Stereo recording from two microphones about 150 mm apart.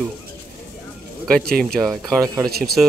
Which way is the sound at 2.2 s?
25° right (ahead or behind).